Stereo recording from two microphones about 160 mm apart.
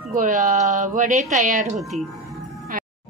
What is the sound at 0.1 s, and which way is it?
Speech, 55° right (ahead or behind).